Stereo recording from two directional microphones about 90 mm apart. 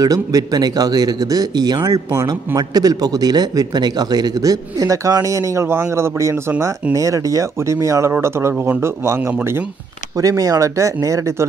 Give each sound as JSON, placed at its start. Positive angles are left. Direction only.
{"t": 0.0, "sound": "speech", "side_deg": -40}